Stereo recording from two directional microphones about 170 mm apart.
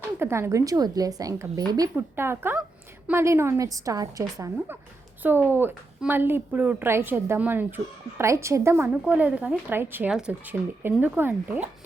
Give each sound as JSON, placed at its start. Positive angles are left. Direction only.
{"t": 0.2, "sound": "a woman's voice", "side_deg": -15}